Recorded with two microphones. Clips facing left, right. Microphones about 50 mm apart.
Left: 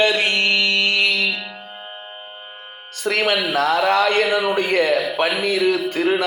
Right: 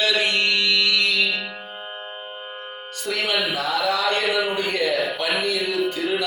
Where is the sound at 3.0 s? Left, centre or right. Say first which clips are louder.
Left 4 dB; left.